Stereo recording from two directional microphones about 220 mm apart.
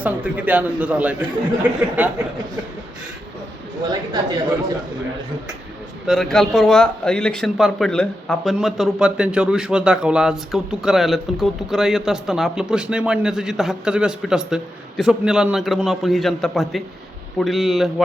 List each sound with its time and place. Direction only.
0.0 s a man's voice: 5° right (ahead or behind)
3.8 s speech: 20° right (ahead or behind)
6.1 s speech: centre (ahead or behind)